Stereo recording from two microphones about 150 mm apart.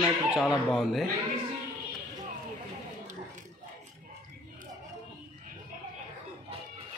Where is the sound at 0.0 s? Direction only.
5° right (ahead or behind).